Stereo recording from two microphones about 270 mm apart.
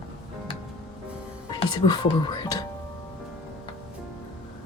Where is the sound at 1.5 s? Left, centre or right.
Centre.